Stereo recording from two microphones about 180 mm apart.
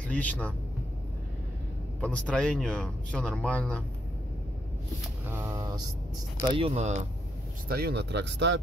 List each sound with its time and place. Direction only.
0.1 s speech: 10° left (ahead or behind)
2.0 s speech: 5° left (ahead or behind)
5.3 s a sound: 15° right (ahead or behind)
6.4 s speech: 25° right (ahead or behind)
6.7 s speech: 40° right (ahead or behind)
7.6 s speech: 60° right (ahead or behind); by 8.5 s 75° right (ahead or behind)